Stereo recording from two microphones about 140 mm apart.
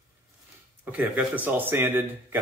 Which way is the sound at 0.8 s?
10° right (ahead or behind).